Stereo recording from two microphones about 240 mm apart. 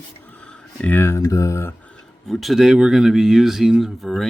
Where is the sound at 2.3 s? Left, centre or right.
Centre.